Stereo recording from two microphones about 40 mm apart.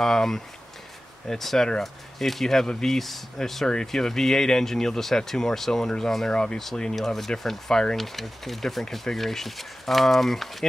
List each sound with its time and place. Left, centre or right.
0.0 s speech: centre
1.4 s speech: centre; by 6.6 s left
7.0 s speech: centre